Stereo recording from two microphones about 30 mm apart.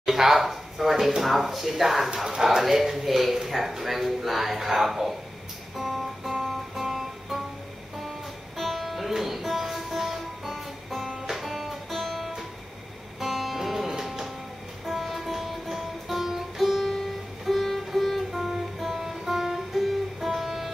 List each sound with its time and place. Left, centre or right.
0.0 s a sound: centre
0.4 s speech: centre
2.6 s speech: centre
5.8 s music: centre
8.5 s music: centre